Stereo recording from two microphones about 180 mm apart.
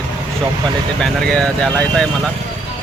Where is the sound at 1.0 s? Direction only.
5° left (ahead or behind).